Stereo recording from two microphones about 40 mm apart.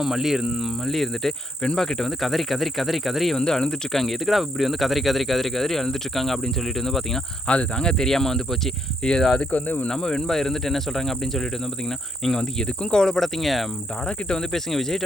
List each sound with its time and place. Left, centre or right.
0.0 s speech: centre
0.9 s insect: centre
1.6 s speech: centre
3.3 s speech: centre
7.4 s cricket: left
7.9 s insect: centre
9.0 s speech: centre
9.5 s speech: left
9.9 s insect: centre
14.1 s speech: left
14.5 s insect: centre